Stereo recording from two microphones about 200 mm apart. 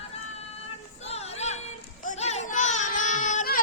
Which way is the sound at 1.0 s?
30° left (ahead or behind).